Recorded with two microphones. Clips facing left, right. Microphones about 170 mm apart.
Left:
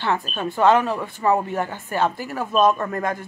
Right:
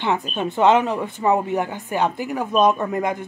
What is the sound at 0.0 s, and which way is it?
Speech, 20° right (ahead or behind).